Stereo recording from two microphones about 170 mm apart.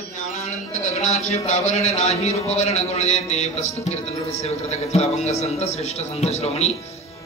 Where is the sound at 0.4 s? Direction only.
45° left (ahead or behind).